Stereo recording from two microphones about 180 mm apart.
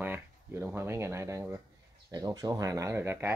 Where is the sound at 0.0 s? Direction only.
10° right (ahead or behind).